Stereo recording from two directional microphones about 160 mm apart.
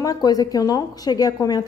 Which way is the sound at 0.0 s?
25° left (ahead or behind).